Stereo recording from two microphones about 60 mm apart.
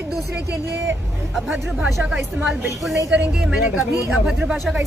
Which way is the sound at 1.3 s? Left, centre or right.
Centre.